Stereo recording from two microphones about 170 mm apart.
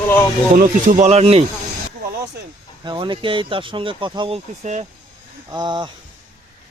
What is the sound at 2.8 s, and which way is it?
Speech, 30° right (ahead or behind).